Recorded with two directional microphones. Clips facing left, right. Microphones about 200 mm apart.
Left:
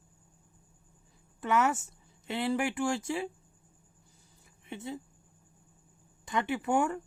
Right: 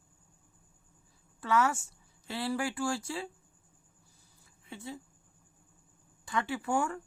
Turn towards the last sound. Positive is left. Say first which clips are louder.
# left 3 dB
turn(degrees=20)  # may be behind; listen again after turning